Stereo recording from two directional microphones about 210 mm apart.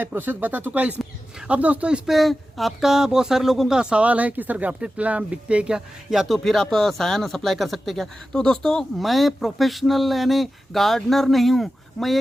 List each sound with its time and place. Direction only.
0.0 s speech: 10° right (ahead or behind)